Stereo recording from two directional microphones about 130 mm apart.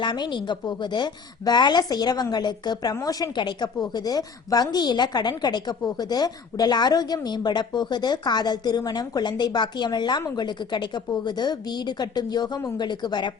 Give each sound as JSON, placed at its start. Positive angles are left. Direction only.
{"t": 0.0, "sound": "a woman's voice", "side_deg": 35}